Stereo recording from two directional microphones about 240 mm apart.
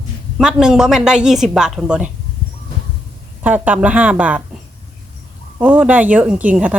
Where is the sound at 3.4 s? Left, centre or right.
Centre.